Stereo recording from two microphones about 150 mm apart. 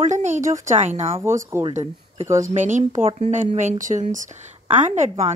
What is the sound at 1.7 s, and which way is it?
Speech, 45° right (ahead or behind).